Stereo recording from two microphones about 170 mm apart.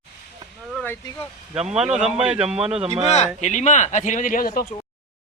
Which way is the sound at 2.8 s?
35° right (ahead or behind).